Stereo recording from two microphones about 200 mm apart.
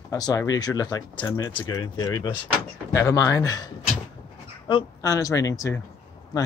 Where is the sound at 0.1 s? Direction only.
15° left (ahead or behind).